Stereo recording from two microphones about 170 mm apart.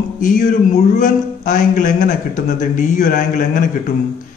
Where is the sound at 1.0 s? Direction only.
50° left (ahead or behind).